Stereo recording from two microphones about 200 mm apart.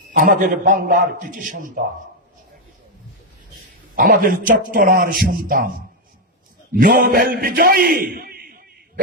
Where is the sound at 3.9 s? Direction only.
45° right (ahead or behind).